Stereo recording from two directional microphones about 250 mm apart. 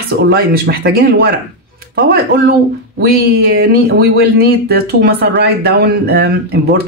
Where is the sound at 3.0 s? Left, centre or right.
Right.